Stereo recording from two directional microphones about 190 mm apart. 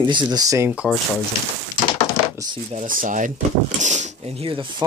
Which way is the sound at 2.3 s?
20° right (ahead or behind).